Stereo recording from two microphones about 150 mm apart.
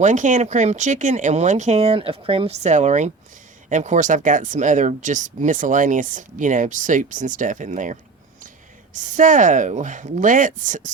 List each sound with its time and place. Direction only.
0.0 s speech: 55° right (ahead or behind); by 2.6 s 40° right (ahead or behind)
2.6 s speech: 50° right (ahead or behind)